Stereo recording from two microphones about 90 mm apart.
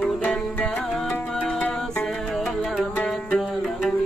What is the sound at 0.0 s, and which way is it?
Music, 15° left (ahead or behind).